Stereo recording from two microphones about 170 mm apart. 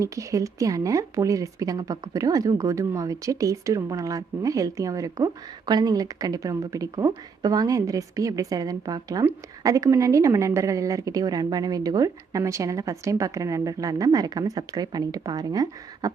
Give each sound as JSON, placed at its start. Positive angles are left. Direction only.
{"t": 0.0, "sound": "speech", "side_deg": -20}